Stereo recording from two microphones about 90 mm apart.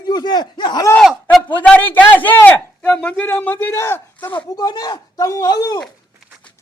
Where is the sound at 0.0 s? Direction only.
50° left (ahead or behind).